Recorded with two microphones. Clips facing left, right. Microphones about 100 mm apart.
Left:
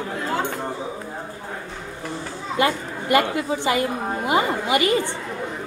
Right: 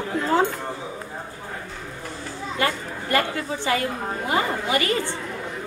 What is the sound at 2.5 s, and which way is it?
A woman's voice, 15° left (ahead or behind).